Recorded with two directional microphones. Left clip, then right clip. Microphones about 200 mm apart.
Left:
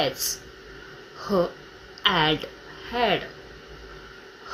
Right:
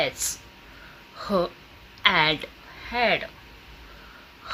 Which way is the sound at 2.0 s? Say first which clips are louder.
Right 1 dB; 45° right (ahead or behind).